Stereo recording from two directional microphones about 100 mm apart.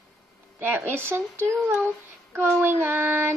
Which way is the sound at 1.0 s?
25° right (ahead or behind).